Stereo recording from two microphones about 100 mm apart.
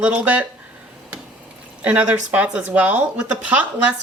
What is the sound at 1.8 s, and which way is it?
Speech, 15° right (ahead or behind).